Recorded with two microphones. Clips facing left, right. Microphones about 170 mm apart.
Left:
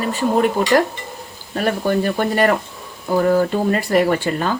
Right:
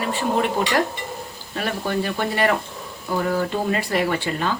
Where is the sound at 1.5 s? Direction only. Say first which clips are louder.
Left 6 dB; 45° left (ahead or behind).